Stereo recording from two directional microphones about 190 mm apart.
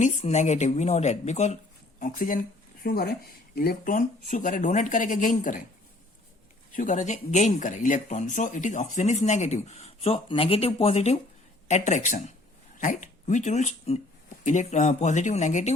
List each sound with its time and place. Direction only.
0.0 s speech: 40° left (ahead or behind)
6.7 s speech: 40° left (ahead or behind)